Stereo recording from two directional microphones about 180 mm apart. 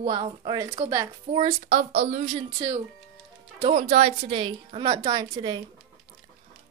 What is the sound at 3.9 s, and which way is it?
A woman's voice, 35° right (ahead or behind).